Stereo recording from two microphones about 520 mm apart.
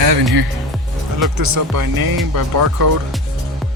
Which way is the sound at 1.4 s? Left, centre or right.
Right.